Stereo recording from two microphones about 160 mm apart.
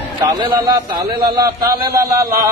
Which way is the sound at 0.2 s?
30° right (ahead or behind).